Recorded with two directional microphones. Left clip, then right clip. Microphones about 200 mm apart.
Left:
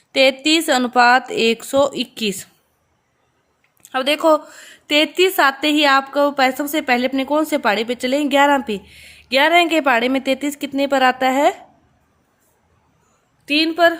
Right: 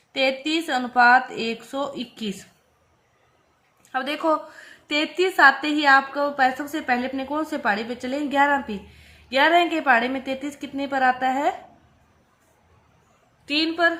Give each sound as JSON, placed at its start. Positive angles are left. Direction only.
{"t": 0.1, "sound": "a woman's voice", "side_deg": 55}
{"t": 3.8, "sound": "a woman's voice", "side_deg": 50}
{"t": 13.4, "sound": "a woman's voice", "side_deg": 40}